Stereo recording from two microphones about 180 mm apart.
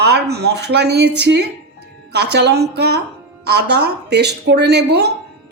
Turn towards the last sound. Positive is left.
turn(degrees=-65)  # may be behind; listen again after turning